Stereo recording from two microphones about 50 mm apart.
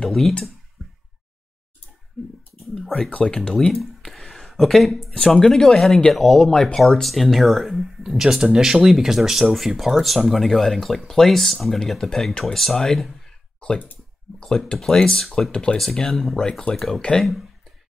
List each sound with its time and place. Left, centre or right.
0.0 s speech: centre
2.6 s speech: centre
3.1 s speech: left
3.3 s speech: centre
5.1 s speech: centre
13.6 s speech: centre
14.8 s speech: centre
15.8 s speech: centre
17.0 s speech: centre